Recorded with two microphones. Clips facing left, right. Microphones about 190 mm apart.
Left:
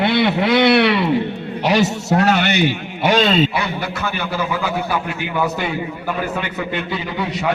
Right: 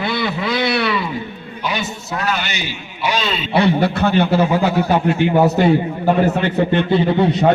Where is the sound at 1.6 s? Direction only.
80° left.